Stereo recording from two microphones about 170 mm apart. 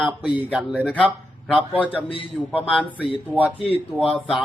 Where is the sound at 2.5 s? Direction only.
5° right (ahead or behind).